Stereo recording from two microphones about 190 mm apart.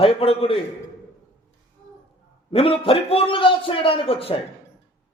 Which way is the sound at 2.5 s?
30° left (ahead or behind).